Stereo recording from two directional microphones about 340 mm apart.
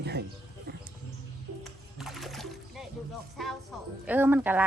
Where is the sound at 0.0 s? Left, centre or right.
Right.